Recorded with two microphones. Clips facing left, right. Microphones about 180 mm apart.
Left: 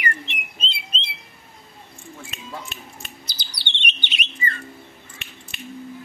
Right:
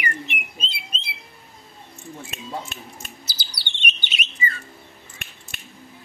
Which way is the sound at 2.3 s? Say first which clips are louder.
Right 4 dB; 45° right (ahead or behind).